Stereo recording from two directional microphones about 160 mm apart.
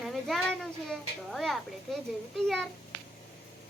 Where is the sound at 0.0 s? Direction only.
Centre (ahead or behind).